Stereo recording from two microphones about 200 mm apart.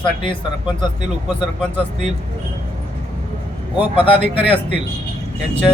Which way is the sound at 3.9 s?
25° left (ahead or behind).